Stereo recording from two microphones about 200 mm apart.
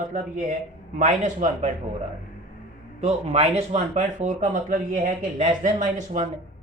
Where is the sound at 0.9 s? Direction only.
35° right (ahead or behind).